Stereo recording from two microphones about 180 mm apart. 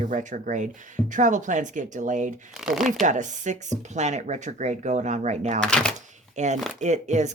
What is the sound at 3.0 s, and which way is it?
Speech, 45° right (ahead or behind).